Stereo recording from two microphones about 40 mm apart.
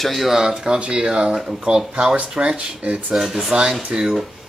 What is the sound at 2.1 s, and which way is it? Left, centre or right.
Speech, right.